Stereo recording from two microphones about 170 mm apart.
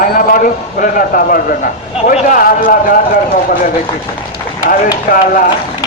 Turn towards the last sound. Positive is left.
turn(degrees=55)  # may be behind; listen again after turning